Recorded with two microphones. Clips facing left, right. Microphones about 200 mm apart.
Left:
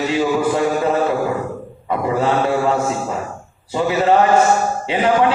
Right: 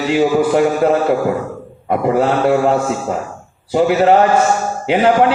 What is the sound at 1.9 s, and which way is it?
Mantra, 55° right (ahead or behind).